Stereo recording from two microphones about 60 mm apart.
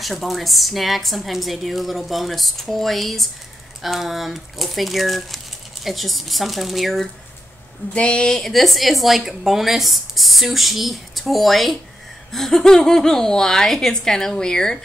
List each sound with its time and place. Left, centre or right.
0.0 s a woman's voice: centre
7.9 s a woman's voice: centre